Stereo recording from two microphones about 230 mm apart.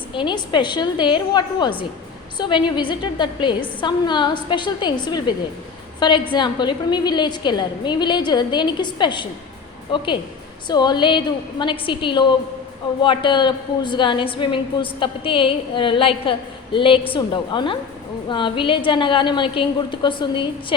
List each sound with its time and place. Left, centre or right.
0.1 s a woman's voice: centre
10.7 s a woman's voice: centre